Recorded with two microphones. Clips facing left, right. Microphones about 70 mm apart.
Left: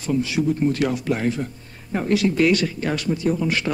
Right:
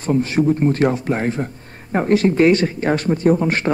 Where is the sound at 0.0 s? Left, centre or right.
Right.